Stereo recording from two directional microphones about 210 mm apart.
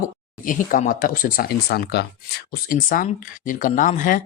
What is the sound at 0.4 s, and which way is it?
Speech, 40° left (ahead or behind).